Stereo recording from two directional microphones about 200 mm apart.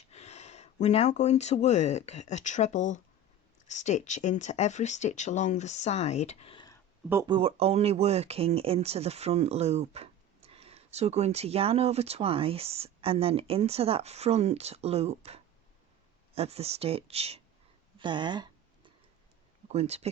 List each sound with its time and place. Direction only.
0.1 s speech: 35° left (ahead or behind)
7.1 s speech: 20° right (ahead or behind)
18.0 s a sound: 20° right (ahead or behind)
19.6 s speech: 30° right (ahead or behind)